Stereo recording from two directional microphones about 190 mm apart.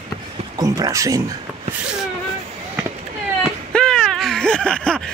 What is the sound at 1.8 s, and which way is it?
Speech, 5° right (ahead or behind).